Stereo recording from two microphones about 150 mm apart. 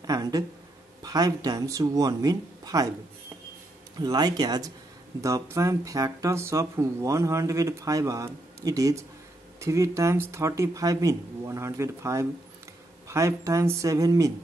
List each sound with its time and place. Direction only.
0.0 s a sound: 25° right (ahead or behind)
1.0 s speech: 25° right (ahead or behind)
4.0 s speech: 30° right (ahead or behind)